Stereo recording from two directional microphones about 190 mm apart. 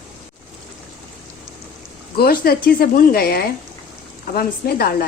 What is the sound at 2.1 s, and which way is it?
Speech, 55° left (ahead or behind).